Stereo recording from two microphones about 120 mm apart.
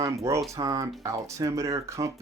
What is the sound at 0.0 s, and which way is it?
Speech, 25° right (ahead or behind).